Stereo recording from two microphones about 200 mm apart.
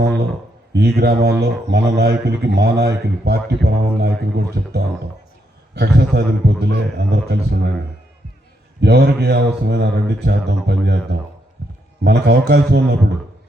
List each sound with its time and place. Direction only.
0.8 s speech: 55° right (ahead or behind)
8.8 s speech: 55° right (ahead or behind)